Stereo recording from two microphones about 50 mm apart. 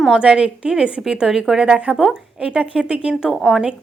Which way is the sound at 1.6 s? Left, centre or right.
Right.